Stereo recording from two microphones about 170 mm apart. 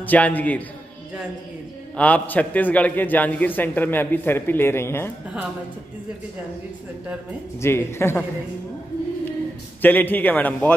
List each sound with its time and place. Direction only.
0.0 s a man's voice: 10° left (ahead or behind)
2.0 s a man's voice: 10° left (ahead or behind)
7.6 s a man's voice: 15° left (ahead or behind)
9.8 s a man's voice: 10° left (ahead or behind)